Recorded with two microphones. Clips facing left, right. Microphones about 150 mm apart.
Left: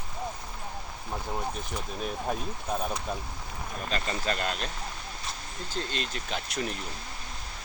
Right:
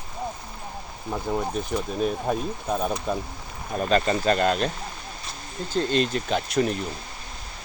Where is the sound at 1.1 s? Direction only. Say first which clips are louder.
Right 7 dB; 60° right (ahead or behind).